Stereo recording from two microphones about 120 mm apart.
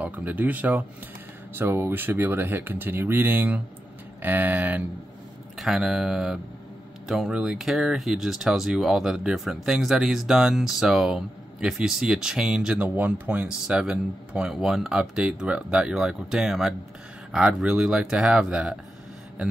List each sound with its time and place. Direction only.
0.0 s speech: 15° right (ahead or behind)
5.6 s speech: 5° right (ahead or behind)